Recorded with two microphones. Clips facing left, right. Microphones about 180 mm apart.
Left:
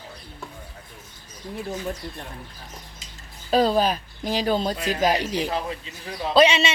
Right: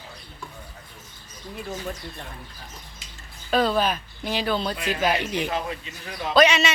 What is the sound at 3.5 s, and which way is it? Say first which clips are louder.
Speech: left 2 dB; 35° left (ahead or behind).